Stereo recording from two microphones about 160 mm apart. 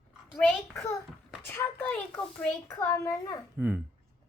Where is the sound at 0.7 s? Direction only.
15° left (ahead or behind).